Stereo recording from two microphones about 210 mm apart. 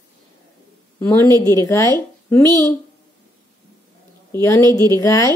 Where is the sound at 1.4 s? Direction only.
15° left (ahead or behind).